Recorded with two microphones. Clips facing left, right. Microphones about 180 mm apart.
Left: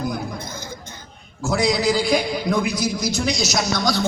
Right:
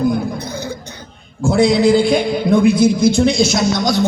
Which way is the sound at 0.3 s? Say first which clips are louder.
Right 8 dB; 70° right (ahead or behind).